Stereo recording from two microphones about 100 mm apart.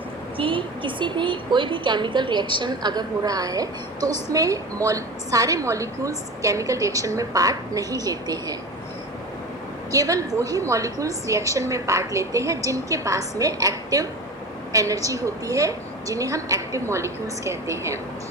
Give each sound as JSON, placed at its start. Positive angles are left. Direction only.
{"t": 0.3, "sound": "a woman's voice", "side_deg": -60}
{"t": 9.9, "sound": "a woman's voice", "side_deg": -35}